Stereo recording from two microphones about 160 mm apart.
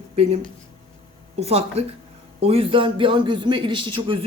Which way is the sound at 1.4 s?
40° right (ahead or behind).